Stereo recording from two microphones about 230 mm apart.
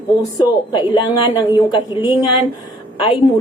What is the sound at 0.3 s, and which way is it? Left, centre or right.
A woman's voice, left.